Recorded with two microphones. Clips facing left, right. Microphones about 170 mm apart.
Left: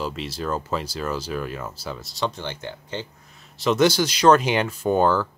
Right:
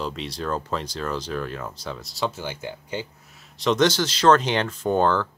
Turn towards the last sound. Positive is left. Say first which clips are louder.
# left 1 dB
turn(degrees=10)  # may be behind; listen again after turning